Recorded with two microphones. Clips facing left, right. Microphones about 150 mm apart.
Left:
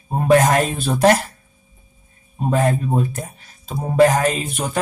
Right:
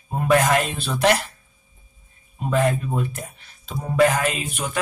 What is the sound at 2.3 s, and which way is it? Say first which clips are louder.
Speech: left 2 dB; 40° left (ahead or behind).